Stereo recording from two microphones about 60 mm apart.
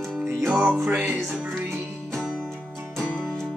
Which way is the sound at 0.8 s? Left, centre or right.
Right.